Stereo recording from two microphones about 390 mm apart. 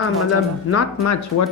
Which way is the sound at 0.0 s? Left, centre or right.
Left.